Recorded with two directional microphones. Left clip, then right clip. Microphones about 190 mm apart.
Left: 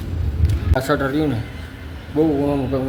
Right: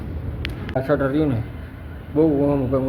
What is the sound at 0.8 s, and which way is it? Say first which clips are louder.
A man's voice: even; 5° left (ahead or behind).